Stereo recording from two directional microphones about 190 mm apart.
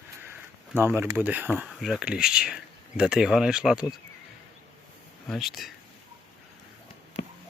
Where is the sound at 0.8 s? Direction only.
10° right (ahead or behind).